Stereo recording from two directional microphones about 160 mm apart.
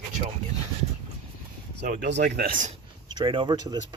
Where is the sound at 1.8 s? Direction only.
70° right (ahead or behind).